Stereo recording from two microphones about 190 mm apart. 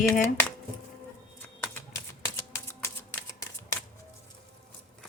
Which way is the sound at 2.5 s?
15° left (ahead or behind).